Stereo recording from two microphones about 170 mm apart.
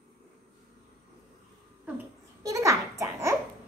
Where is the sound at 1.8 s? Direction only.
15° right (ahead or behind).